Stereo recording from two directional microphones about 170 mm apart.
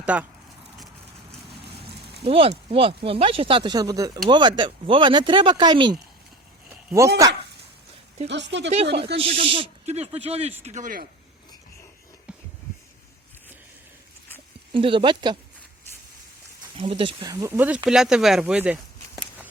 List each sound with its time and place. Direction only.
0.0 s speech: 10° right (ahead or behind)
2.2 s speech: 35° right (ahead or behind)
6.7 s a sound: 15° right (ahead or behind)
8.3 s speech: 90° right
9.1 s speech: 35° right (ahead or behind)
14.7 s speech: 30° right (ahead or behind)
16.7 s speech: 30° right (ahead or behind)
17.3 s speech: 15° right (ahead or behind)